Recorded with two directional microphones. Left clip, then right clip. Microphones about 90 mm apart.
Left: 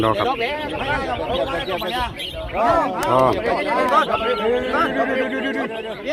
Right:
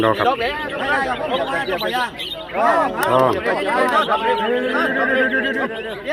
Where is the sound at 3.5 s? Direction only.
40° left (ahead or behind).